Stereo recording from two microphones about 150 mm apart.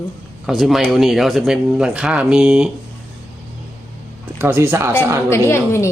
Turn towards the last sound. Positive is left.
turn(degrees=20)  # may be behind; listen again after turning